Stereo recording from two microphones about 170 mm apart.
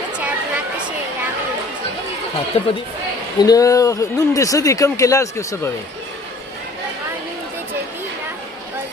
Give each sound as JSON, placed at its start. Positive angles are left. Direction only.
{"t": 0.2, "sound": "a sound", "side_deg": -10}
{"t": 2.5, "sound": "speech", "side_deg": 35}
{"t": 3.4, "sound": "speech", "side_deg": 20}